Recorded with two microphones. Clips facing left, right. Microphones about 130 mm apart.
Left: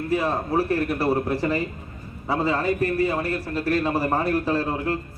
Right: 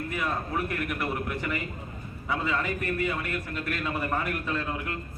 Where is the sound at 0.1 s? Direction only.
30° left (ahead or behind).